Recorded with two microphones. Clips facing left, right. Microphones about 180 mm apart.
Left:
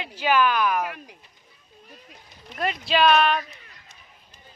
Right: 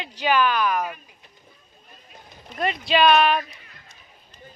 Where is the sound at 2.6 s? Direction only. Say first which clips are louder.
Right 2 dB; centre (ahead or behind).